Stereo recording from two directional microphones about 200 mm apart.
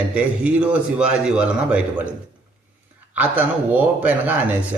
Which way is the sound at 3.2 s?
10° right (ahead or behind).